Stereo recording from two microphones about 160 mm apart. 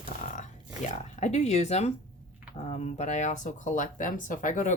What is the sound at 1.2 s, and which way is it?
Speech, 45° left (ahead or behind).